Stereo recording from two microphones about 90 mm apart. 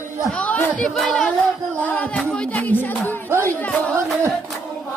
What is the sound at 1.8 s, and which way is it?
Music, 15° left (ahead or behind).